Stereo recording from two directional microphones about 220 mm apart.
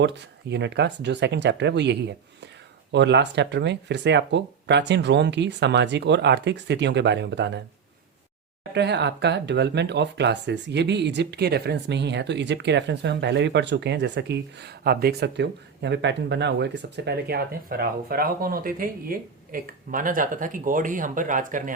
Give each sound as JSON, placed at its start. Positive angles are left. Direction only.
{"t": 0.0, "sound": "speech", "side_deg": -50}
{"t": 8.7, "sound": "speech", "side_deg": -50}